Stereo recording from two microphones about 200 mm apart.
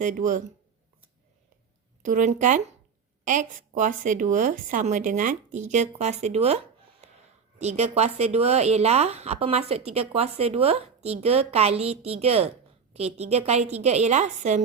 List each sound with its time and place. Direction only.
0.0 s speech: 40° right (ahead or behind)
2.0 s speech: 40° right (ahead or behind)
7.0 s a sound: 35° right (ahead or behind)
7.6 s speech: 35° right (ahead or behind)